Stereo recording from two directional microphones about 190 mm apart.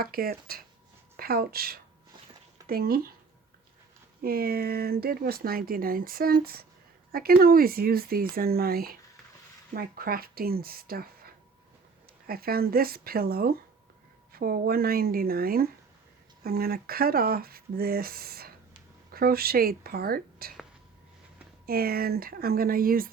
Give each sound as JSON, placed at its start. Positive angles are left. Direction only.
{"t": 0.0, "sound": "speech", "side_deg": -50}
{"t": 4.2, "sound": "speech", "side_deg": -50}
{"t": 12.3, "sound": "speech", "side_deg": -50}
{"t": 21.7, "sound": "speech", "side_deg": -55}